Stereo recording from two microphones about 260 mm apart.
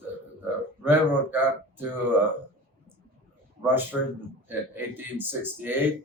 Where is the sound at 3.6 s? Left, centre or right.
Centre.